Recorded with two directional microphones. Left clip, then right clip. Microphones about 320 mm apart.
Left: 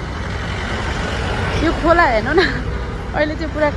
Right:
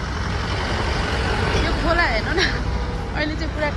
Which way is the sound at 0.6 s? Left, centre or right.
Right.